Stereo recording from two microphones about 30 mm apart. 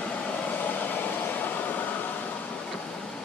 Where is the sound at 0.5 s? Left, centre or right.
Left.